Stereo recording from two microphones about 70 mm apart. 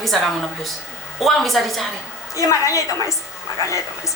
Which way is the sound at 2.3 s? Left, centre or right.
Left.